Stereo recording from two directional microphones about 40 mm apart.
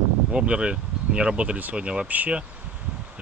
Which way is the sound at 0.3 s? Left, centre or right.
Right.